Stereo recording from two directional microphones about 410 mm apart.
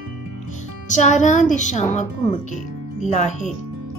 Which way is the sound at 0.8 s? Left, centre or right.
Centre.